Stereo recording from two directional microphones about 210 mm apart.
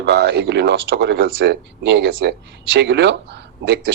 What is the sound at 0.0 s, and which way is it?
Speech, 55° right (ahead or behind).